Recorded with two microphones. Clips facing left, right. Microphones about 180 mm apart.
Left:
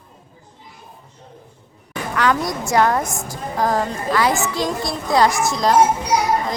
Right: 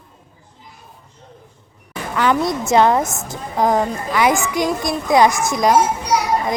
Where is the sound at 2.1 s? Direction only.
25° right (ahead or behind).